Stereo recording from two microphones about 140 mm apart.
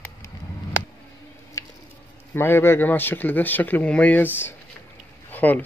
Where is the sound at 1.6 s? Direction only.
20° left (ahead or behind).